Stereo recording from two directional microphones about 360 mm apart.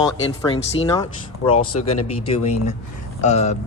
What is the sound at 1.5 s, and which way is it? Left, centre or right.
Speech, left.